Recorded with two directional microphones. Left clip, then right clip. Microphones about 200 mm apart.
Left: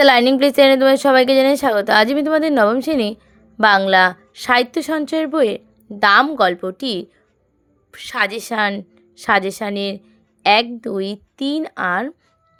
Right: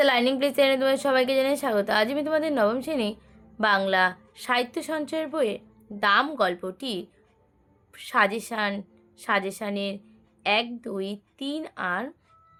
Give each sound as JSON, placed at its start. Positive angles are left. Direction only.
{"t": 0.0, "sound": "a woman's voice", "side_deg": 45}